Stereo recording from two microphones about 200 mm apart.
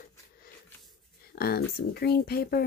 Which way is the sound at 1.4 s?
50° left (ahead or behind).